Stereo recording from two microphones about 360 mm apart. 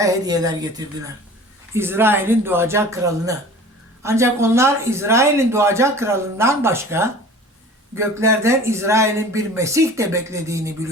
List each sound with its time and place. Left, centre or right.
0.0 s speech: centre